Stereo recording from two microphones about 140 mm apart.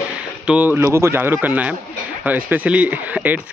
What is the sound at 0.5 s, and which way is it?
Speech, 10° right (ahead or behind).